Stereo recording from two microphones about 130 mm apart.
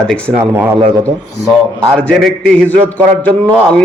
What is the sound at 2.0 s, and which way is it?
Speech, 5° left (ahead or behind).